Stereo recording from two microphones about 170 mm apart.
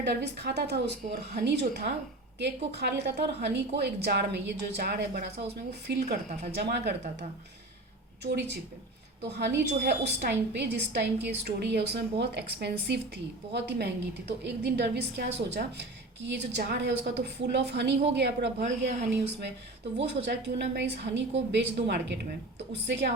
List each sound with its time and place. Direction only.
0.0 s a woman's voice: 80° right
6.5 s a woman's voice: 70° right (ahead or behind)
8.2 s a woman's voice: 80° right
18.6 s speech: 50° right (ahead or behind)
20.0 s a woman's voice: 90° right